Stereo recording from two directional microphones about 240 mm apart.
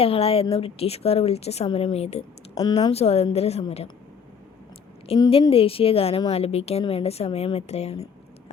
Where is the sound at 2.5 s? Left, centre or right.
Centre.